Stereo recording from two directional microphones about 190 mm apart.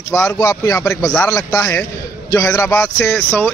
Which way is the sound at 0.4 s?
20° left (ahead or behind).